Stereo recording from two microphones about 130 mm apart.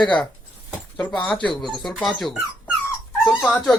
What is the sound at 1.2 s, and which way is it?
Speech, 10° left (ahead or behind).